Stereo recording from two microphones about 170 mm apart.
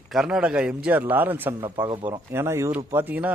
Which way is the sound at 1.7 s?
20° right (ahead or behind).